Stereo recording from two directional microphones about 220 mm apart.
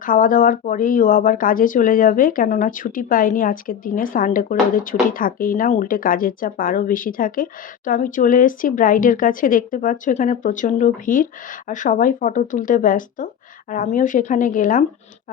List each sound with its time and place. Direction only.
0.0 s speech: 40° left (ahead or behind)